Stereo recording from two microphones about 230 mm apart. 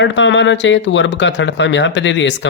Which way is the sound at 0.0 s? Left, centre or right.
Left.